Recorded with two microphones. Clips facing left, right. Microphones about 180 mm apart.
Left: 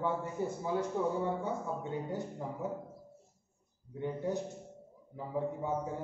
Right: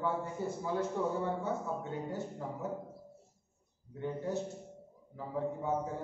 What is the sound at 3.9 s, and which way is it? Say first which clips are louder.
A man's voice: left 1 dB; 15° left (ahead or behind).